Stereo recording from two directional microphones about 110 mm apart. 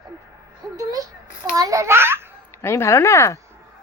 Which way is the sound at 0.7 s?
35° right (ahead or behind).